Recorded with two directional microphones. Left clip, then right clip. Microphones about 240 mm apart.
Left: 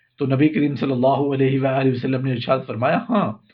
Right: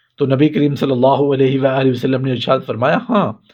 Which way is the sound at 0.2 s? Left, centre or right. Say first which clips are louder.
Right 5 dB; right.